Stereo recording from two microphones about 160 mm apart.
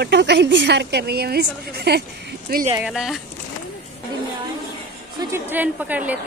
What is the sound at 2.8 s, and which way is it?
Speech, 5° right (ahead or behind).